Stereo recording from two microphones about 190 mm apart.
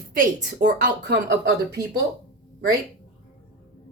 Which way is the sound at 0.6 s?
55° right (ahead or behind).